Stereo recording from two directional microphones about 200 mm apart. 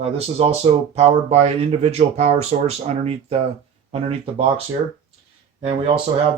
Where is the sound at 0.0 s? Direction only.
30° right (ahead or behind).